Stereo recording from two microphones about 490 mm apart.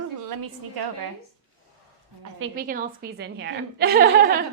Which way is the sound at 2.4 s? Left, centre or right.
Centre.